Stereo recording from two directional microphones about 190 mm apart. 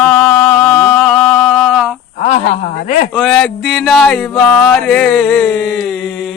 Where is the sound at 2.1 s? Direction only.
35° left (ahead or behind).